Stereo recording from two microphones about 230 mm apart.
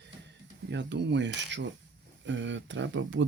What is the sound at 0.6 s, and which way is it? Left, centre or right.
Speech, right.